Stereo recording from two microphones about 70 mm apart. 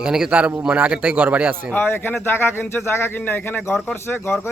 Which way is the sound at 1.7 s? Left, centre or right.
Left.